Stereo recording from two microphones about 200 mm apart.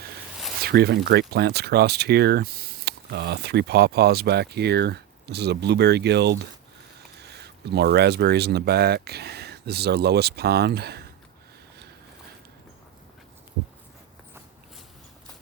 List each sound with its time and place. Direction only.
0.6 s speech: 55° right (ahead or behind)